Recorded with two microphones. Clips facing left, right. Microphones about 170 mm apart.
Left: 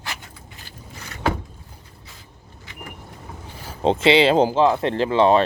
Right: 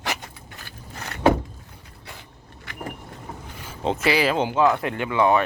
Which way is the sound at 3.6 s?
35° left (ahead or behind).